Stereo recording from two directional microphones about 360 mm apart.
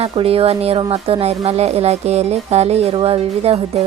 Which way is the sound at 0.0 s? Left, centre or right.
Centre.